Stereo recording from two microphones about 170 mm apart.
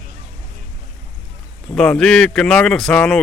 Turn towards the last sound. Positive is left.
turn(degrees=5)  # may be behind; listen again after turning